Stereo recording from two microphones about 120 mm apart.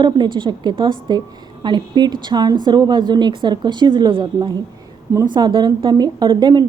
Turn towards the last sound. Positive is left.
turn(degrees=-40)  # may be behind; listen again after turning